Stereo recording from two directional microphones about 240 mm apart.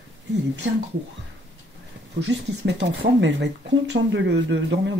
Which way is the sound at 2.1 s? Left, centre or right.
Right.